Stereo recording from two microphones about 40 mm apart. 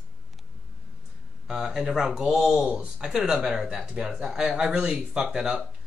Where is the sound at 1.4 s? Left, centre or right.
Centre.